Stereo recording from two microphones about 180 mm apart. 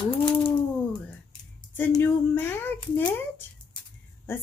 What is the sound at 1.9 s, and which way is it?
Speech, 10° left (ahead or behind).